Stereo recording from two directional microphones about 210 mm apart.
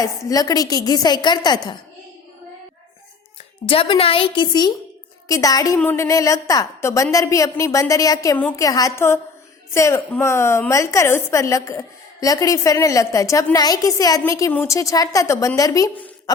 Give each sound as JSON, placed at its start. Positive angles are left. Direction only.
{"t": 0.0, "sound": "a woman's voice", "side_deg": 15}
{"t": 3.7, "sound": "a woman's voice", "side_deg": 25}